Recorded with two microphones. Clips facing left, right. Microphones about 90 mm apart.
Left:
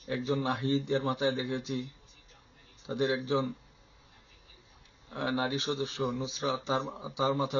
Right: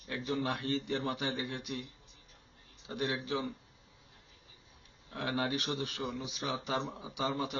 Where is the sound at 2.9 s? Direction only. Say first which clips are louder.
Left 6 dB; 25° left (ahead or behind).